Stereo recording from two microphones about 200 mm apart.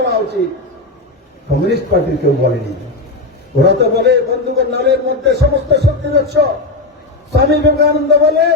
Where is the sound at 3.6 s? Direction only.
55° right (ahead or behind).